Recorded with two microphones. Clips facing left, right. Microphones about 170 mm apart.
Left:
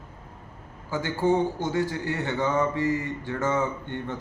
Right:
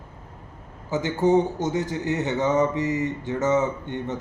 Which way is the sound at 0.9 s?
20° right (ahead or behind).